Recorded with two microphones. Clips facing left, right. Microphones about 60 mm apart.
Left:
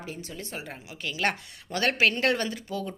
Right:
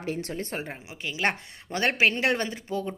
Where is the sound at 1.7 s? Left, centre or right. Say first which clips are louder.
Right 1 dB; right.